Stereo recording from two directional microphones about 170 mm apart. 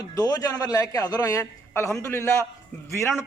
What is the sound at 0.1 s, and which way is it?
A man's voice, 20° left (ahead or behind).